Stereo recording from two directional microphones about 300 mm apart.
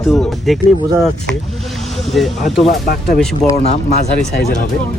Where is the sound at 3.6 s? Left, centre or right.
Left.